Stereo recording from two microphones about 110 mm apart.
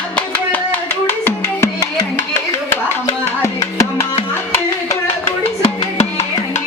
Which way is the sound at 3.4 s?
30° left (ahead or behind).